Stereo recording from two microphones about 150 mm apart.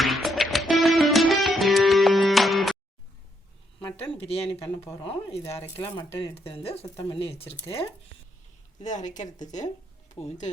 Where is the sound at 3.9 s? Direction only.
40° left (ahead or behind).